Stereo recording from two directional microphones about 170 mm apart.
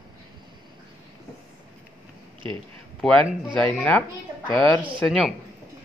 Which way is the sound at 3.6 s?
10° left (ahead or behind).